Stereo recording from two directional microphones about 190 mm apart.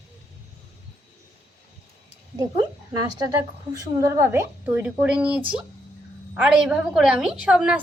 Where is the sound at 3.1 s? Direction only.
20° right (ahead or behind).